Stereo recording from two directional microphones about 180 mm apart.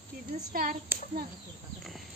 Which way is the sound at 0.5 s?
55° right (ahead or behind).